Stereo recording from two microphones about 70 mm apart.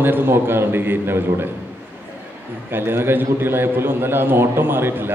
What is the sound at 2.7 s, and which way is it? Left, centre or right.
A man's voice, right.